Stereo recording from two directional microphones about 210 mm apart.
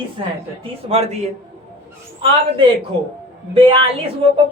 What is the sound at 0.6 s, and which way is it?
Speech, 30° right (ahead or behind).